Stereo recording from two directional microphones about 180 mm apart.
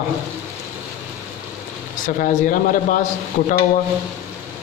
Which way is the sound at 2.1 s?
50° left (ahead or behind).